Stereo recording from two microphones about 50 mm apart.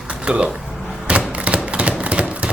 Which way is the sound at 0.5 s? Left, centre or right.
Centre.